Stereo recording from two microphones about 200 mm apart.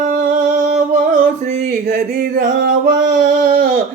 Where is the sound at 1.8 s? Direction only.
55° right (ahead or behind).